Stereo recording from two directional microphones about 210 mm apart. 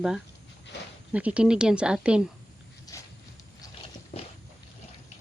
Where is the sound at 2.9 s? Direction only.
15° left (ahead or behind).